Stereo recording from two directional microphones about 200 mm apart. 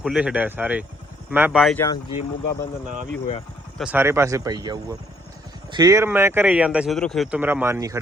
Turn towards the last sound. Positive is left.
turn(degrees=-15)  # may be behind; listen again after turning